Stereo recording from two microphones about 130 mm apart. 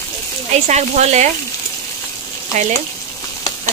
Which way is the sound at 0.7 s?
60° right (ahead or behind).